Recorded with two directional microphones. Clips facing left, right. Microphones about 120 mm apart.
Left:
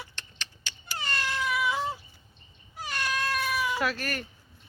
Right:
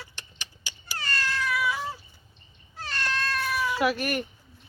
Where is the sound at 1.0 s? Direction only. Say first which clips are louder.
Right 1 dB; 20° left (ahead or behind).